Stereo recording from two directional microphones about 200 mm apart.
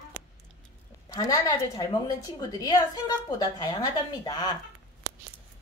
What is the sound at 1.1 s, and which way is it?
A woman's voice, 20° left (ahead or behind).